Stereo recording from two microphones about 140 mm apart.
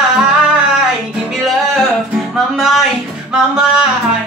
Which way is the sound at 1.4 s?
Centre (ahead or behind).